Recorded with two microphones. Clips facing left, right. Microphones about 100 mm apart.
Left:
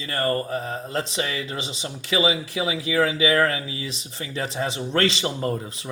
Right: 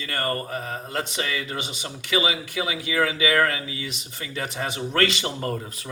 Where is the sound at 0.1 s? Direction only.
30° left (ahead or behind).